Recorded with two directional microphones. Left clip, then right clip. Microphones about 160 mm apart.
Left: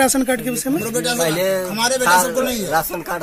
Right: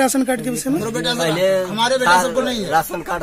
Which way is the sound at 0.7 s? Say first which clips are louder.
Even; 40° left (ahead or behind).